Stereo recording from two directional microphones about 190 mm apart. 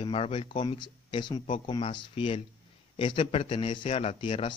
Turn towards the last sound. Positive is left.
turn(degrees=25)  # may be behind; listen again after turning